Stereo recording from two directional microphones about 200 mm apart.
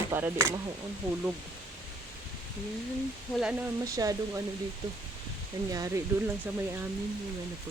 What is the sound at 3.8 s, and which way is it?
Speech, 15° right (ahead or behind).